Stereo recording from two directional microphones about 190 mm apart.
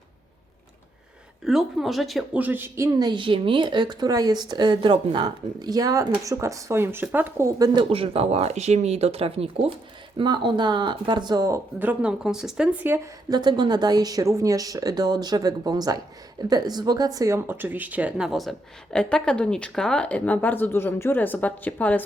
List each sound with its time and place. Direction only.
1.5 s a woman's voice: centre (ahead or behind)
13.3 s a woman's voice: 20° right (ahead or behind); by 22.0 s 10° left (ahead or behind)